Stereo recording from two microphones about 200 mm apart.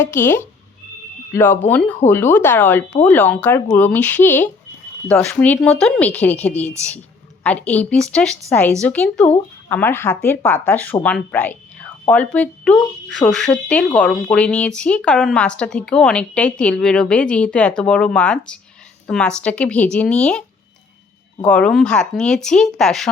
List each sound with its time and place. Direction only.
0.0 s a woman's voice: 10° left (ahead or behind)
21.4 s a woman's voice: 5° left (ahead or behind)